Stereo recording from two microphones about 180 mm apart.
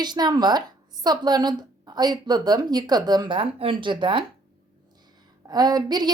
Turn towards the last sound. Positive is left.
turn(degrees=-25)  # may be behind; listen again after turning